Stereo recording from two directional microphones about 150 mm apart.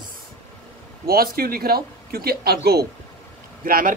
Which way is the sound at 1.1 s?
85° right.